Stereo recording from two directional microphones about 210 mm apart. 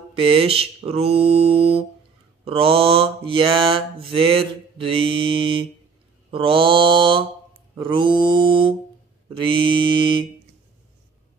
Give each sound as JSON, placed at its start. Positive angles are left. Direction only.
{"t": 0.1, "sound": "mantra", "side_deg": -25}